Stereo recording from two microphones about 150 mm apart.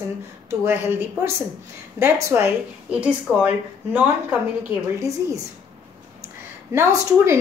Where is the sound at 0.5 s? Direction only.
15° right (ahead or behind).